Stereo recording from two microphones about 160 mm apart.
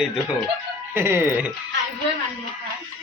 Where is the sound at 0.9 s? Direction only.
15° right (ahead or behind).